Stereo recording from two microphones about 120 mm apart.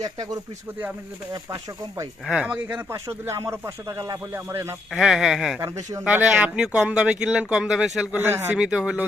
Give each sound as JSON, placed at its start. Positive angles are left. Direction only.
{"t": 0.0, "sound": "speech", "side_deg": -35}
{"t": 1.5, "sound": "speech", "side_deg": -30}
{"t": 2.2, "sound": "speech", "side_deg": -10}
{"t": 2.9, "sound": "speech", "side_deg": -25}
{"t": 4.9, "sound": "speech", "side_deg": -5}
{"t": 8.1, "sound": "speech", "side_deg": -20}
{"t": 8.5, "sound": "speech", "side_deg": -10}